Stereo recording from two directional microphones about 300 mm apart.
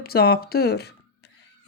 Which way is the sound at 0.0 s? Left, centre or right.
Left.